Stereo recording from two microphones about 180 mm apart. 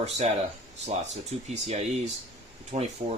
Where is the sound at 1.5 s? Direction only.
40° right (ahead or behind).